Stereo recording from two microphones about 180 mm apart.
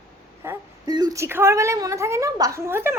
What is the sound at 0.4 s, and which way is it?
A woman's voice, 20° right (ahead or behind).